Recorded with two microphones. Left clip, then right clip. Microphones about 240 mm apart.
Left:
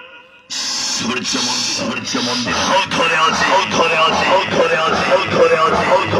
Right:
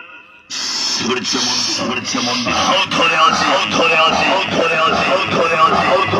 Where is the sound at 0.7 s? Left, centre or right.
Left.